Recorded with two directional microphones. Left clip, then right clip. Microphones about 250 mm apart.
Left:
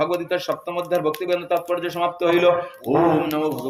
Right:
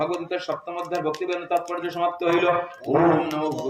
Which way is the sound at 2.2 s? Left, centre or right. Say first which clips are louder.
Left 4 dB; left.